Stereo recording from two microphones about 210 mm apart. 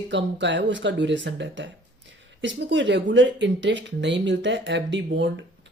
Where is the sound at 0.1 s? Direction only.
60° right (ahead or behind).